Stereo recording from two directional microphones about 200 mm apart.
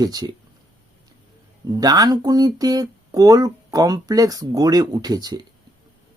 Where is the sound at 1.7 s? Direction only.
20° right (ahead or behind).